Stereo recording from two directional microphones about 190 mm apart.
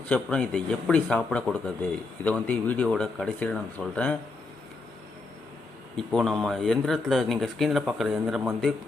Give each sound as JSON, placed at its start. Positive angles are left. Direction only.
{"t": 0.1, "sound": "speech", "side_deg": 5}
{"t": 6.0, "sound": "speech", "side_deg": 5}